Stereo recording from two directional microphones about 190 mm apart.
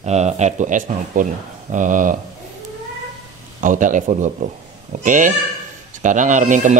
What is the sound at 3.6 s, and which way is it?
Speech, 45° right (ahead or behind).